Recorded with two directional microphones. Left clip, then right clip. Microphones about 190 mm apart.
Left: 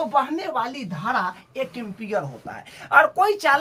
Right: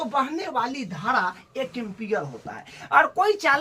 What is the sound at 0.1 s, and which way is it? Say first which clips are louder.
A woman's voice: left 3 dB; 15° left (ahead or behind).